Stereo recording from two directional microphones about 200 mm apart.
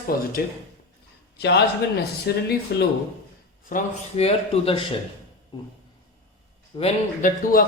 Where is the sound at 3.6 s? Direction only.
35° left (ahead or behind).